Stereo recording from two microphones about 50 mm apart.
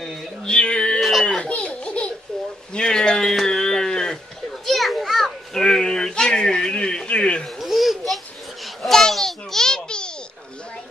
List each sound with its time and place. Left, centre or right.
0.5 s music: centre
1.2 s baby laughter: left
2.7 s a sound: centre
4.6 s children playing: centre; by 7.4 s left
7.4 s a sound: centre
8.6 s babbling: centre